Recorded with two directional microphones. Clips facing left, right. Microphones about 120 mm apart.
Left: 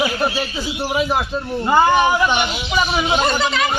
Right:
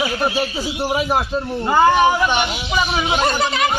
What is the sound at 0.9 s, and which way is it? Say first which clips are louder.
Speech: left 1 dB; 5° right (ahead or behind).